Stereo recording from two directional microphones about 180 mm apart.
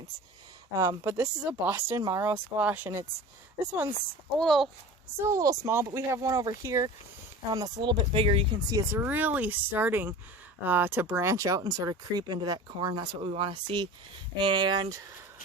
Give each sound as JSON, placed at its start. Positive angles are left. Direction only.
{"t": 0.8, "sound": "speech", "side_deg": -15}
{"t": 4.4, "sound": "a child's voice", "side_deg": 0}
{"t": 5.2, "sound": "speech", "side_deg": -20}
{"t": 8.7, "sound": "speech", "side_deg": -15}